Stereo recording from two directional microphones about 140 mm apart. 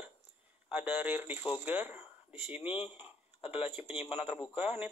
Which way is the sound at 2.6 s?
45° left (ahead or behind).